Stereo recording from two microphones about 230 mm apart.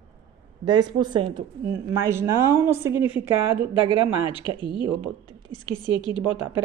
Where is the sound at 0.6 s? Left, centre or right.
Centre.